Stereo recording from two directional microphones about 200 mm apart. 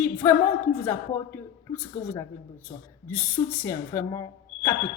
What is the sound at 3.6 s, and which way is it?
A woman's voice, 15° left (ahead or behind).